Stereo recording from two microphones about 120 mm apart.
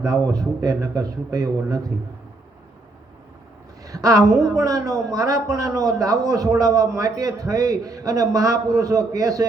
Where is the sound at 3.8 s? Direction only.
30° right (ahead or behind).